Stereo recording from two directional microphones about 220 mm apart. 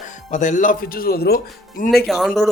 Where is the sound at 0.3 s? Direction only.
35° left (ahead or behind).